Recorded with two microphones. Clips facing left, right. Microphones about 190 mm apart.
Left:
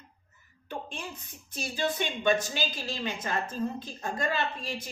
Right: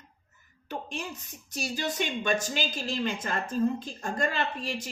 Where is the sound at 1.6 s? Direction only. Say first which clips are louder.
Left 1 dB; 45° right (ahead or behind).